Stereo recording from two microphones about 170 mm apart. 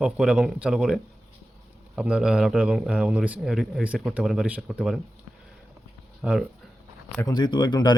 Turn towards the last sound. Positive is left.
turn(degrees=25)  # may be behind; listen again after turning